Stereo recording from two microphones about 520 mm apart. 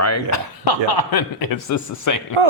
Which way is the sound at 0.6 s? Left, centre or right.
Left.